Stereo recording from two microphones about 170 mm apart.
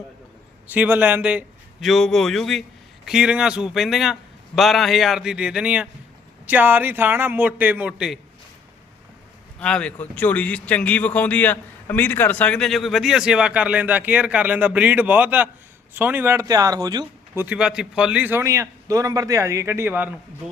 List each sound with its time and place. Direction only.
0.7 s a man's voice: 10° right (ahead or behind)
9.6 s a man's voice: 5° left (ahead or behind); by 17.1 s 25° right (ahead or behind)
17.3 s speech: 10° right (ahead or behind)